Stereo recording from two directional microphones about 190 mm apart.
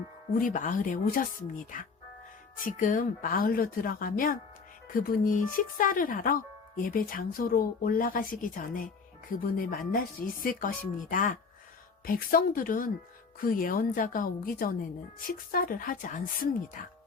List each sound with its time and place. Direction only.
0.3 s speech: 45° left (ahead or behind)